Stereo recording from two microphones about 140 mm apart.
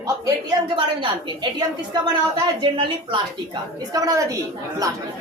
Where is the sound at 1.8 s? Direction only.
30° right (ahead or behind).